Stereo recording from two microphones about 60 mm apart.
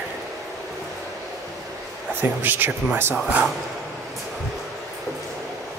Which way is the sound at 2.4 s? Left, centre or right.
Right.